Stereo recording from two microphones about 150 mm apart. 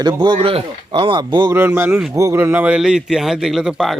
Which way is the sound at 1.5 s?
15° right (ahead or behind).